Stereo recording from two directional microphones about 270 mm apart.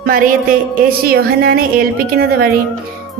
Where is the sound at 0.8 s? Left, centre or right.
Right.